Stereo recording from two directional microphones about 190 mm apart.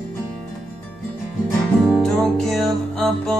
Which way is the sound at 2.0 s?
5° left (ahead or behind).